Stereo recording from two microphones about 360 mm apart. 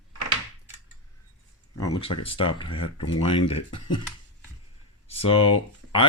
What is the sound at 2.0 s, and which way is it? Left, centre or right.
Speech, centre.